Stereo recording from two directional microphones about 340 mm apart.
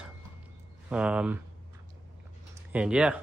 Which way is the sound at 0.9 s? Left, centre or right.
Centre.